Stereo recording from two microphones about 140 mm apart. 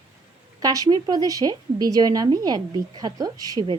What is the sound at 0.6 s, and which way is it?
A woman's voice, 25° right (ahead or behind).